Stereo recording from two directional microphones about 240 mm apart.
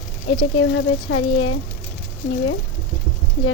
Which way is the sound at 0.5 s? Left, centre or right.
Left.